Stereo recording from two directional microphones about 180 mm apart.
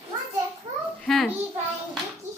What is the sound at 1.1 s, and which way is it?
Speech, centre (ahead or behind).